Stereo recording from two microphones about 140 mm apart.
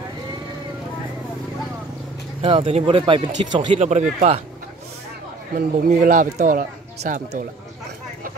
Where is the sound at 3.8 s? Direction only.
60° right (ahead or behind).